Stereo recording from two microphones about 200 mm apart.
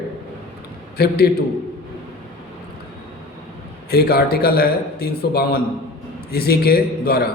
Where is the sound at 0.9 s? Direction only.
50° left (ahead or behind).